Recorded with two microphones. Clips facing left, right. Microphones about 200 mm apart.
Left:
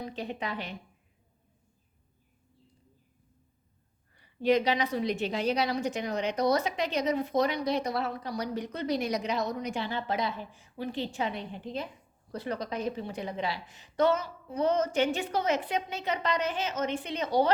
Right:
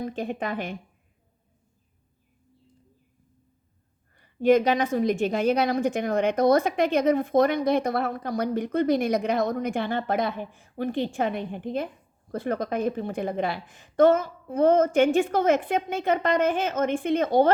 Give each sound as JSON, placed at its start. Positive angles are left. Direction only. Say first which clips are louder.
{"t": 0.0, "sound": "a woman's voice", "louder": "right 6 dB", "side_deg": -50}
{"t": 4.2, "sound": "a woman's voice", "louder": "right 6 dB", "side_deg": -50}